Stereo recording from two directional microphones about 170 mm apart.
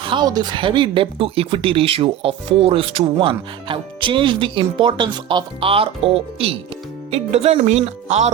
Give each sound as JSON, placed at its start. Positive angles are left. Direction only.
{"t": 0.0, "sound": "speech", "side_deg": -30}